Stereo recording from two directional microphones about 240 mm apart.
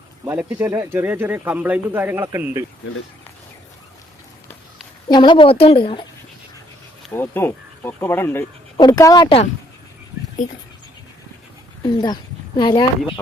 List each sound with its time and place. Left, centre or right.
0.3 s speech: centre
5.0 s speech: centre
7.1 s speech: centre
10.4 s speech: left
11.8 s a woman's voice: centre